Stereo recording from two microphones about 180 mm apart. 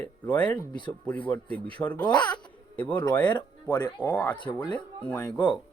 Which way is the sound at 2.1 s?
5° left (ahead or behind).